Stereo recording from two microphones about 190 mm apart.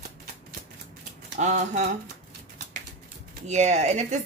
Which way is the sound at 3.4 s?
35° right (ahead or behind).